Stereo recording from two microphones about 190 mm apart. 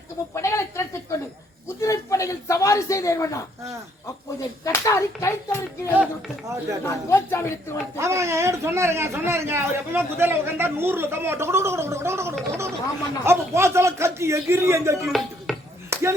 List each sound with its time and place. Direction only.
0.3 s snake: 15° left (ahead or behind)
1.6 s a man's voice: 15° left (ahead or behind)
7.9 s a man's voice: 15° right (ahead or behind)
15.0 s music: centre (ahead or behind)
15.9 s chop: 15° right (ahead or behind)